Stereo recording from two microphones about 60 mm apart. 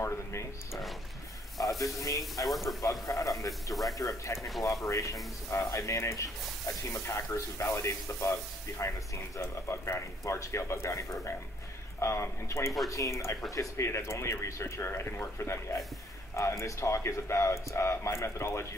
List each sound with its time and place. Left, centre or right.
0.0 s a sound: left
1.6 s a man's voice: left
2.4 s speech: centre
3.1 s a man's voice: left